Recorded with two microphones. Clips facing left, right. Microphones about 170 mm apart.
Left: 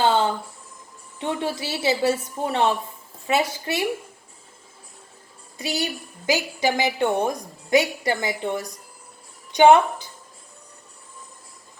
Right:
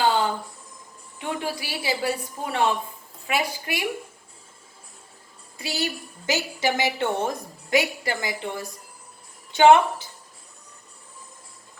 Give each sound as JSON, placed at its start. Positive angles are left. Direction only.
{"t": 0.0, "sound": "a sound", "side_deg": 20}
{"t": 1.2, "sound": "a woman's voice", "side_deg": 25}
{"t": 5.5, "sound": "a woman's voice", "side_deg": 20}